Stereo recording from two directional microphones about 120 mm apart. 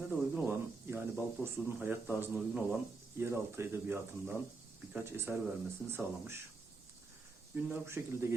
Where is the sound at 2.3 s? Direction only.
5° right (ahead or behind).